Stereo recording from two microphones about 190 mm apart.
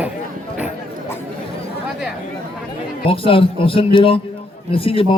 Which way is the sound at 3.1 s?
30° left (ahead or behind).